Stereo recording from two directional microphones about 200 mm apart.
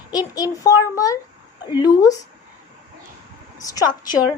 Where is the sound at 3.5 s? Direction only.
20° left (ahead or behind).